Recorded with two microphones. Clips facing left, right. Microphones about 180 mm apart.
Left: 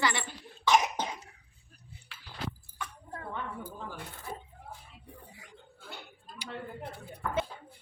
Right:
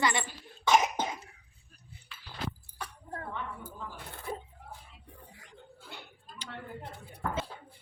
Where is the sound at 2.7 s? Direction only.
35° right (ahead or behind).